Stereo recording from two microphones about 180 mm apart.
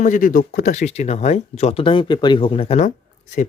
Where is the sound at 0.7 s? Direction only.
40° left (ahead or behind).